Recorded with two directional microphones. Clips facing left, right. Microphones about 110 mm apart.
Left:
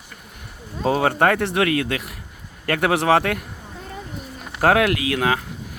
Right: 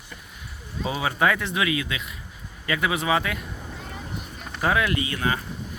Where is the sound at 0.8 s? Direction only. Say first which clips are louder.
Left 6 dB; 60° left (ahead or behind).